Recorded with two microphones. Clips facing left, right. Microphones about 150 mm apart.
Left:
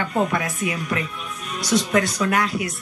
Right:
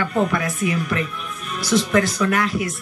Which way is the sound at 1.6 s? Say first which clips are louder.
Right 2 dB; 35° left (ahead or behind).